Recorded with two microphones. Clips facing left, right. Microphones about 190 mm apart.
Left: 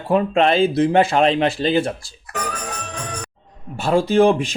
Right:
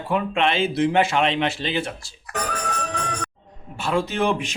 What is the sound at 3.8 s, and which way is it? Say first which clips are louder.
Speech: left 8 dB; 35° left (ahead or behind).